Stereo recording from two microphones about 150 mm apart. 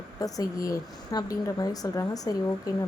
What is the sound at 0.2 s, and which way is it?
A woman's voice, 25° left (ahead or behind).